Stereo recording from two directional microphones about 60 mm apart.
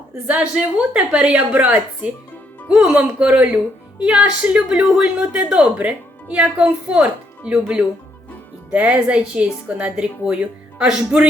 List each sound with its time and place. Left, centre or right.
0.3 s speech: centre
2.9 s a woman's voice: centre